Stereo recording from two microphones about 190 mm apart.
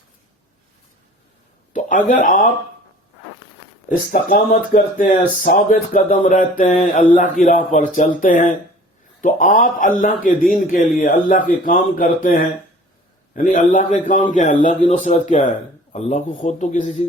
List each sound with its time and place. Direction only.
1.7 s speech: 45° left (ahead or behind)
3.8 s a man's voice: 45° left (ahead or behind)